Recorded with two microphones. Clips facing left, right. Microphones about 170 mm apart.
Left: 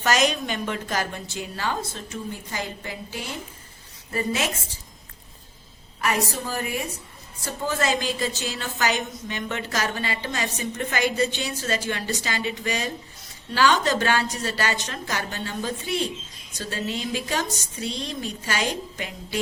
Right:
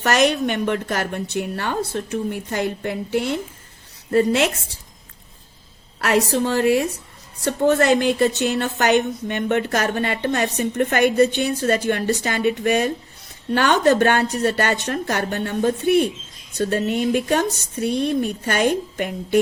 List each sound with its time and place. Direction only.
0.0 s a woman's voice: 65° right (ahead or behind)
6.0 s a woman's voice: 75° right (ahead or behind)
7.4 s a woman's voice: 65° right (ahead or behind)